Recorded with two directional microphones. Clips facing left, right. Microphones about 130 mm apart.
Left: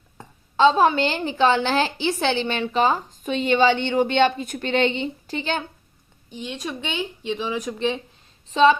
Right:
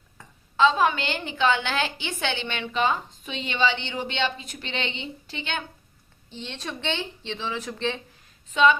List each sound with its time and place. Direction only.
0.2 s a woman's voice: 30° left (ahead or behind)
6.3 s speech: 10° left (ahead or behind)
8.4 s a woman's voice: 35° left (ahead or behind)